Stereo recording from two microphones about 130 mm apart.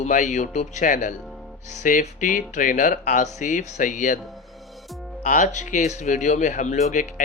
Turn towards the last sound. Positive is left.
turn(degrees=80)